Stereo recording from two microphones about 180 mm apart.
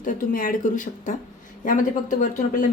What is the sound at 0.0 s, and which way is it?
Speech, 50° left (ahead or behind).